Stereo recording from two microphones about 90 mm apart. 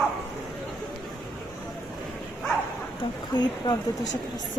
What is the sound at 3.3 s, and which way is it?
Speech, 50° left (ahead or behind).